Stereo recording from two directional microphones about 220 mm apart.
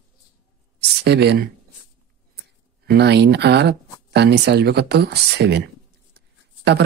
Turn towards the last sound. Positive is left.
turn(degrees=-50)  # may be behind; listen again after turning